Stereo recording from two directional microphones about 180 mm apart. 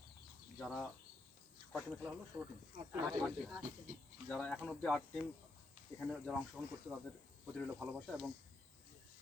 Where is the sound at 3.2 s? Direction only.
Centre (ahead or behind).